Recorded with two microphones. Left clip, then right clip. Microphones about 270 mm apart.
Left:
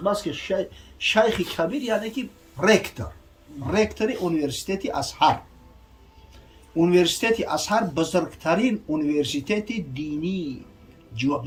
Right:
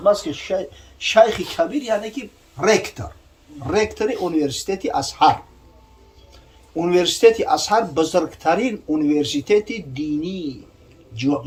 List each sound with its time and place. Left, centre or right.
0.0 s speech: centre
6.7 s speech: centre